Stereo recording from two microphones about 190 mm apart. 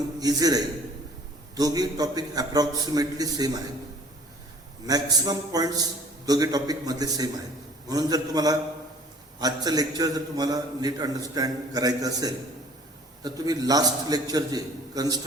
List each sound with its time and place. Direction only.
0.2 s a man's voice: 20° right (ahead or behind)
4.9 s a man's voice: 20° right (ahead or behind)